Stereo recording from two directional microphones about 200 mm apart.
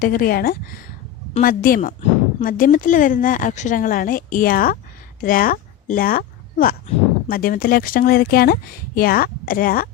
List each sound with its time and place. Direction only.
0.0 s speech: 45° left (ahead or behind)